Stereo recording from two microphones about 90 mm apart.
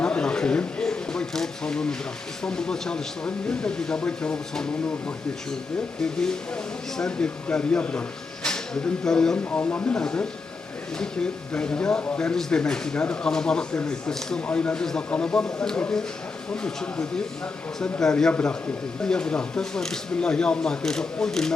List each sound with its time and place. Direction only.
0.0 s a sound: 10° left (ahead or behind)
2.4 s speech: 10° left (ahead or behind)
9.6 s speech: 20° left (ahead or behind)